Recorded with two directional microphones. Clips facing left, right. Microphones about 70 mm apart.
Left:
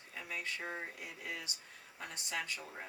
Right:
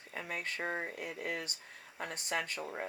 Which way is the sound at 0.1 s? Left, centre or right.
Right.